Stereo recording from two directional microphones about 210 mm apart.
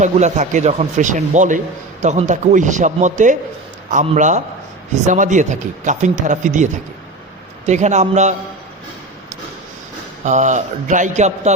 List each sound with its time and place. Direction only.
0.0 s speech: 35° right (ahead or behind)
7.7 s speech: 35° right (ahead or behind)
10.2 s speech: 35° right (ahead or behind)